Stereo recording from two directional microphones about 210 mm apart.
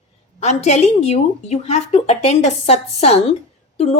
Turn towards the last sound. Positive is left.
turn(degrees=30)  # may be behind; listen again after turning